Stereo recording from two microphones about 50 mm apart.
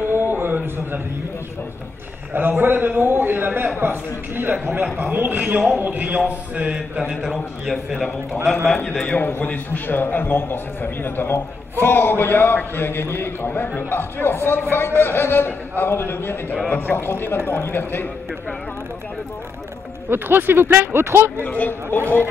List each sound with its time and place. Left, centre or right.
0.1 s a sound: right
2.3 s a man's voice: right
7.2 s a man's voice: centre
8.7 s a man's voice: left
9.2 s a man's voice: left
20.1 s speech: right
21.5 s speech: left